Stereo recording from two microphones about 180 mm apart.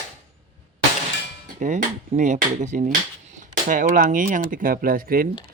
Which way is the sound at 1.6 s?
40° right (ahead or behind).